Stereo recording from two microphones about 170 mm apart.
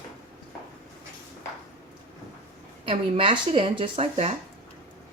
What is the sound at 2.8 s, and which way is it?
Speech, 30° right (ahead or behind).